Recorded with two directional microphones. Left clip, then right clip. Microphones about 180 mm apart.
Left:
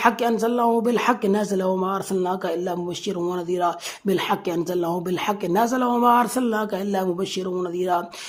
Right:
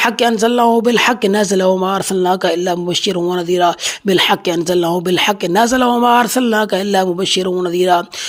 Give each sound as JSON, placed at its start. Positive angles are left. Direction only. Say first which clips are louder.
{"t": 0.0, "sound": "speech", "louder": "right 7 dB", "side_deg": -25}
{"t": 4.1, "sound": "speech", "louder": "right 9 dB", "side_deg": -25}